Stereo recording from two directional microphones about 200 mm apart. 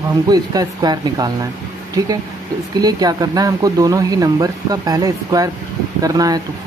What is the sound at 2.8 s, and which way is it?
Speech, 20° right (ahead or behind).